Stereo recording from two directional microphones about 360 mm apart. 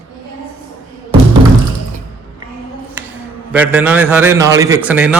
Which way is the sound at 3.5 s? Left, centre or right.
Centre.